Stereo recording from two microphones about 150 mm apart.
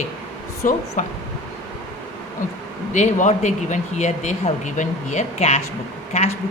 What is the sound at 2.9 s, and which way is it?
Speech, 55° left (ahead or behind).